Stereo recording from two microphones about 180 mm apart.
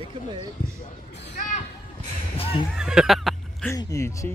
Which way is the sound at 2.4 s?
30° left (ahead or behind).